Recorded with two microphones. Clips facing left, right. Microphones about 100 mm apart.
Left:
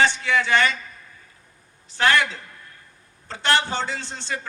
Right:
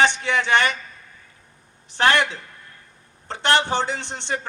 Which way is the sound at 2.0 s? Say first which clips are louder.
Right 1 dB; 25° right (ahead or behind).